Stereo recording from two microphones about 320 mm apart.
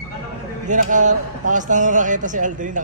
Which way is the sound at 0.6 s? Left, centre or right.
Right.